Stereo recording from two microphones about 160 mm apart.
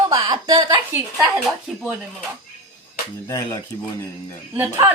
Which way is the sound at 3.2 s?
20° left (ahead or behind).